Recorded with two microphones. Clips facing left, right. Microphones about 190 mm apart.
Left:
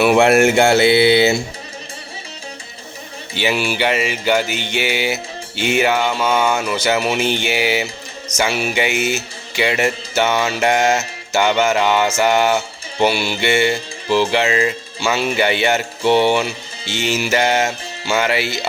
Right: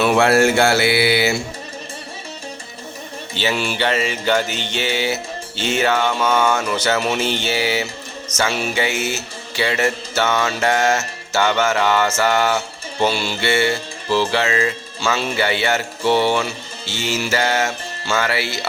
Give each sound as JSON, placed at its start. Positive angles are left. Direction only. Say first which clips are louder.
{"t": 0.0, "sound": "mantra", "louder": "left 2 dB", "side_deg": 15}
{"t": 3.3, "sound": "music", "louder": "left 2 dB", "side_deg": 10}